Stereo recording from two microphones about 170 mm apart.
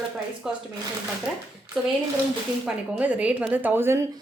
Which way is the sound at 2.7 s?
5° right (ahead or behind).